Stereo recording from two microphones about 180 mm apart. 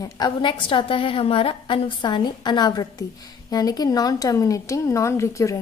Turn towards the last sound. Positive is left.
turn(degrees=15)  # may be behind; listen again after turning